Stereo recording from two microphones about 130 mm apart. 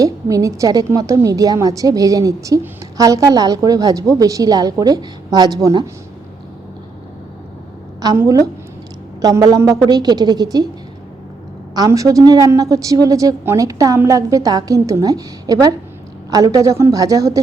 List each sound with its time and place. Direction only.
0.0 s a woman's voice: 25° right (ahead or behind)
8.0 s a woman's voice: 25° right (ahead or behind)
11.7 s a woman's voice: 30° right (ahead or behind)